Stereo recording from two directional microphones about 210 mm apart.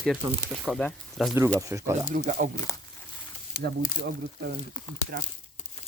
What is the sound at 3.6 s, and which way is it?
Speech, 50° right (ahead or behind).